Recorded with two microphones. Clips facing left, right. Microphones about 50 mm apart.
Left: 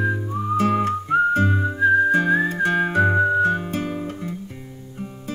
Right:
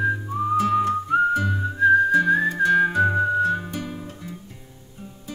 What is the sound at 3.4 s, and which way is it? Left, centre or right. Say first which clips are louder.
Music: left 3 dB; left.